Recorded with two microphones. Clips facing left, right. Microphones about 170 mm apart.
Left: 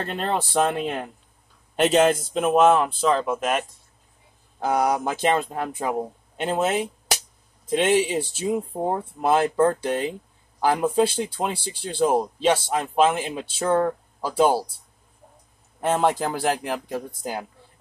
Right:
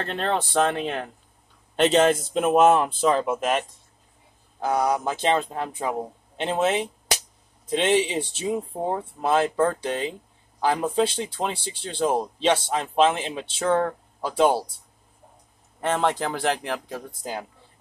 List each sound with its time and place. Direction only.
0.0 s speech: 10° left (ahead or behind)
4.6 s speech: 20° left (ahead or behind)
7.7 s speech: 10° left (ahead or behind)
15.8 s speech: 10° left (ahead or behind)